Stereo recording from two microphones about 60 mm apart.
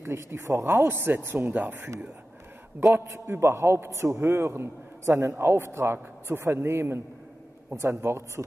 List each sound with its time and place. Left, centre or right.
0.0 s a man's voice: right
2.8 s a man's voice: right